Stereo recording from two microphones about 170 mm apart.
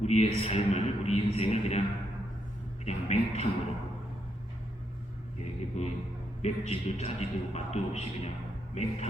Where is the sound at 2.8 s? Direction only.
40° left (ahead or behind).